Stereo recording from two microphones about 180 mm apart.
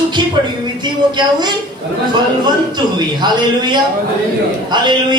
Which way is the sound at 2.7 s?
25° right (ahead or behind).